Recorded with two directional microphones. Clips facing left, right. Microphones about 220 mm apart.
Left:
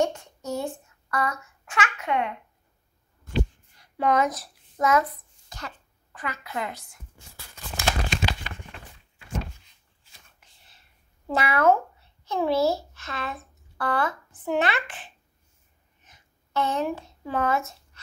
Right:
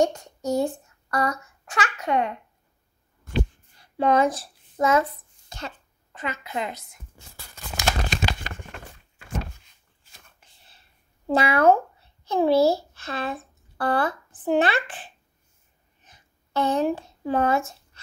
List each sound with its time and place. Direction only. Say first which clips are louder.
0.0 s a child's voice: right 3 dB; 40° right (ahead or behind)
3.7 s hands: right 3 dB; 30° right (ahead or behind)
6.1 s a woman's voice: right 2 dB; 20° right (ahead or behind)
8.1 s crumpling: right 1 dB; 45° right (ahead or behind)
10.4 s a sound: right 2 dB; 30° right (ahead or behind)
11.2 s a child's voice: right 3 dB; 30° right (ahead or behind)
16.0 s a sound: right 2 dB; 35° right (ahead or behind)